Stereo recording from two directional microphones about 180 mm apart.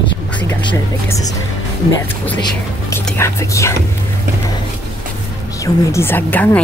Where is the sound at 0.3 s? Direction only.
10° left (ahead or behind).